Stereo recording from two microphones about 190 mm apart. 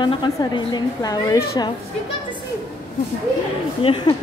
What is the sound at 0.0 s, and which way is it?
A woman's voice, 25° left (ahead or behind).